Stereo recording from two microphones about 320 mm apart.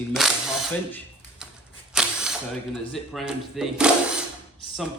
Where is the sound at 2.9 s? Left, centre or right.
Centre.